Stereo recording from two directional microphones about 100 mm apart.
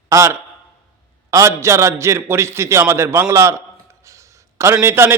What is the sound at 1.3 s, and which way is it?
A man's voice, 30° right (ahead or behind).